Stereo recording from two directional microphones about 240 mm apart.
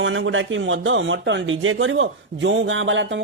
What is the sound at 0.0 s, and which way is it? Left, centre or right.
Speech, right.